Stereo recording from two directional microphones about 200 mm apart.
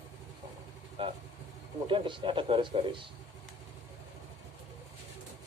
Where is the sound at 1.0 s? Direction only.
25° right (ahead or behind).